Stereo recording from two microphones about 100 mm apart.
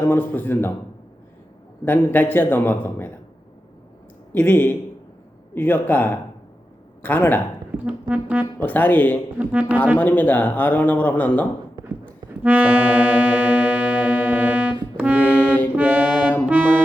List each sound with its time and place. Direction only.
0.0 s a man's voice: 20° left (ahead or behind)
1.8 s a man's voice: 20° left (ahead or behind)
4.3 s a man's voice: 20° left (ahead or behind)
7.9 s music: 10° right (ahead or behind)
8.5 s speech: 20° left (ahead or behind)
9.4 s music: 15° right (ahead or behind)
10.0 s speech: 15° left (ahead or behind)
11.8 s a sound: 50° right (ahead or behind)
12.3 s accordion: 15° right (ahead or behind)
14.9 s music: 15° right (ahead or behind)
15.2 s music: 15° left (ahead or behind)
15.7 s music: 15° right (ahead or behind)